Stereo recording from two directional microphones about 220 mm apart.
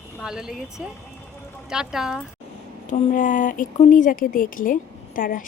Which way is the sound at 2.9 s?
35° left (ahead or behind).